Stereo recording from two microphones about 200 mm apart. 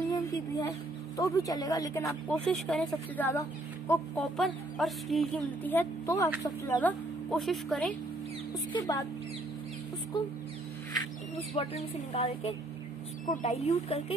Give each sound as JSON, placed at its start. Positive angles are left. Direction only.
{"t": 0.1, "sound": "a sound", "side_deg": 20}
{"t": 1.1, "sound": "speech", "side_deg": 15}
{"t": 2.0, "sound": "speech", "side_deg": 0}
{"t": 4.4, "sound": "speech", "side_deg": 0}
{"t": 8.7, "sound": "speech", "side_deg": 20}
{"t": 11.5, "sound": "speech", "side_deg": 30}